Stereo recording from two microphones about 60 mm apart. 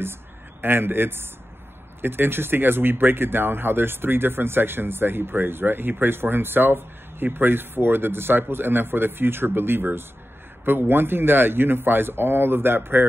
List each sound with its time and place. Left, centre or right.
0.6 s speech: right